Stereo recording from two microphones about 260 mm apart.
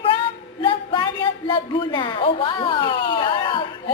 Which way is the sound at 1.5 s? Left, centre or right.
Centre.